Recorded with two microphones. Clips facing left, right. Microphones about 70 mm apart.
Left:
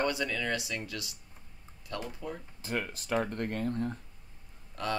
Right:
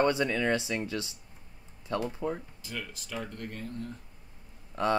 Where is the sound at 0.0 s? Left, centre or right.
Right.